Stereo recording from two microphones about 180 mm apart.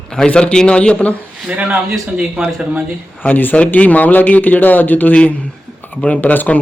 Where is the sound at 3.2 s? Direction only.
10° left (ahead or behind).